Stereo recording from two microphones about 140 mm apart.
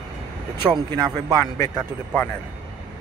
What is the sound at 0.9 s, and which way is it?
Speech, 30° right (ahead or behind).